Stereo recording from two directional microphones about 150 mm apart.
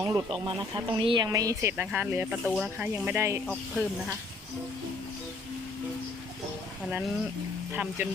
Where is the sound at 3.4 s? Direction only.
5° left (ahead or behind).